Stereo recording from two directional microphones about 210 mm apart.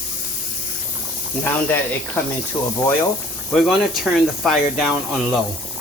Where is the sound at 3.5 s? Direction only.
Centre (ahead or behind).